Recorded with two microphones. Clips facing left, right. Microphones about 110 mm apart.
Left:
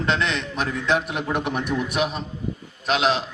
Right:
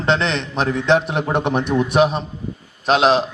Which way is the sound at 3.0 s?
65° right (ahead or behind).